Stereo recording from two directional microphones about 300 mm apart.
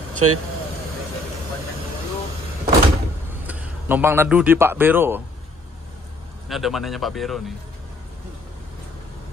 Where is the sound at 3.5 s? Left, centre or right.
Centre.